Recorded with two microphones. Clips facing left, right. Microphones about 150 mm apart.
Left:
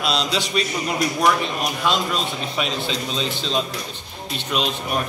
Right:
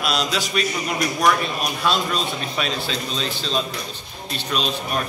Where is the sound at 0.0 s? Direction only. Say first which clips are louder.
Left 1 dB; 25° left (ahead or behind).